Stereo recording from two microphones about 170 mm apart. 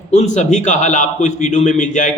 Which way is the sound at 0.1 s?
40° left (ahead or behind).